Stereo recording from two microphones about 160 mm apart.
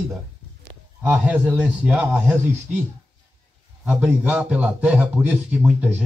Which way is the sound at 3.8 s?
10° right (ahead or behind).